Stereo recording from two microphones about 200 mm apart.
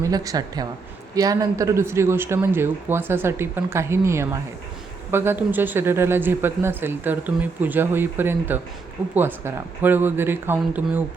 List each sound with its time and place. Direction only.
0.0 s speech: 15° right (ahead or behind)